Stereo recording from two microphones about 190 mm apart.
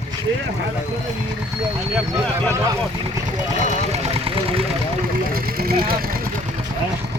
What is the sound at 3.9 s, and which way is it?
Vehicle, 30° right (ahead or behind).